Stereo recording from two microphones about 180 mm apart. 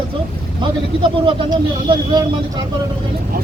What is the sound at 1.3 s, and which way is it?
Speech, 30° right (ahead or behind).